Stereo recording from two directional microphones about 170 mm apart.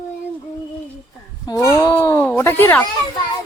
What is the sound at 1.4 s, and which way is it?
Speech, 20° left (ahead or behind).